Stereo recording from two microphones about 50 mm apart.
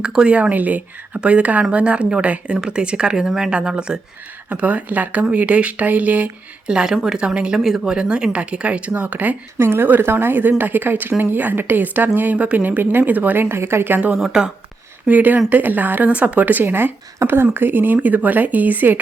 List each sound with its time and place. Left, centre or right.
0.0 s speech: centre
0.5 s speech: right; by 4.0 s centre
4.4 s speech: right
6.7 s speech: centre; by 9.3 s right
9.6 s a woman's voice: right
12.4 s a woman's voice: right
14.1 s speech: centre
15.0 s speech: right